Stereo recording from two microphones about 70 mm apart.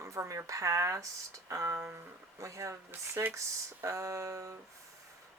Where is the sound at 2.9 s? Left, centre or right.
Right.